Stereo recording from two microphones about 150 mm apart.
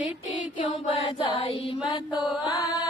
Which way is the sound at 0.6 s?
35° left (ahead or behind).